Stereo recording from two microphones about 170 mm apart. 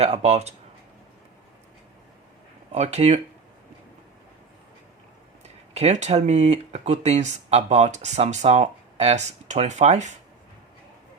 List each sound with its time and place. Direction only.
0.0 s speech: 40° right (ahead or behind)
2.7 s speech: 40° right (ahead or behind)
5.7 s speech: 40° right (ahead or behind)